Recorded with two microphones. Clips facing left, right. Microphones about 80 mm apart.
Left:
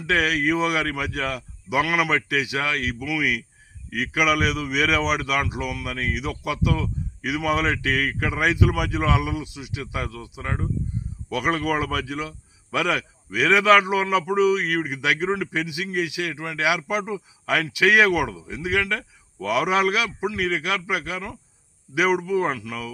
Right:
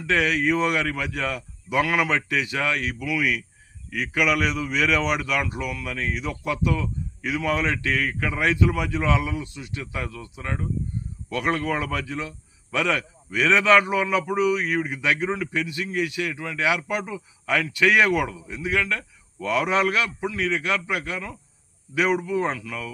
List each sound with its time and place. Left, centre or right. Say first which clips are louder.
0.0 s speech: even; centre
14.6 s speech: even; left
14.8 s speech: left 1 dB; centre